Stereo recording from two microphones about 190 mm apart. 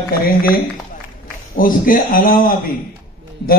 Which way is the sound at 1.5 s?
45° left (ahead or behind).